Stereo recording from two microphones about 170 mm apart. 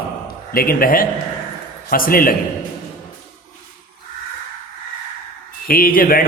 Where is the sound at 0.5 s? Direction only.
60° left (ahead or behind).